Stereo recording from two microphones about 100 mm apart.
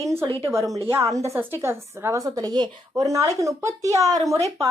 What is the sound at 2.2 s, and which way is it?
Speech, 40° right (ahead or behind).